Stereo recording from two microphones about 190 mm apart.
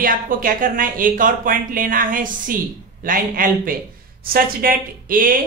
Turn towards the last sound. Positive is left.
turn(degrees=-45)  # may be behind; listen again after turning